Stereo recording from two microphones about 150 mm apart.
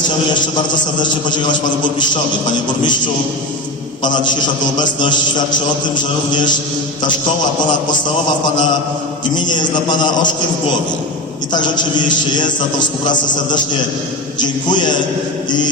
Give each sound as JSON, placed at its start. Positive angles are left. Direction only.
{"t": 4.8, "sound": "a man's voice", "side_deg": 30}
{"t": 9.3, "sound": "a man's voice", "side_deg": 30}
{"t": 11.5, "sound": "a man's voice", "side_deg": 30}
{"t": 14.3, "sound": "a man's voice", "side_deg": 30}